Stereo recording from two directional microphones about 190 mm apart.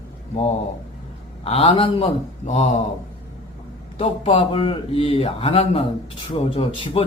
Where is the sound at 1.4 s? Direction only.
30° left (ahead or behind).